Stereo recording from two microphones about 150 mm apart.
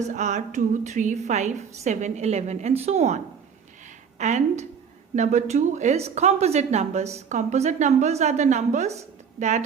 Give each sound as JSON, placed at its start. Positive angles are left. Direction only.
{"t": 0.1, "sound": "a woman's voice", "side_deg": -55}
{"t": 4.2, "sound": "a woman's voice", "side_deg": -50}